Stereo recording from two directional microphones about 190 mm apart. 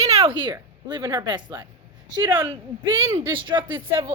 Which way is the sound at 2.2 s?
10° right (ahead or behind).